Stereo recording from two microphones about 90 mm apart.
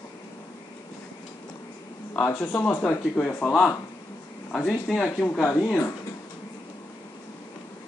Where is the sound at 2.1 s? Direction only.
30° left (ahead or behind).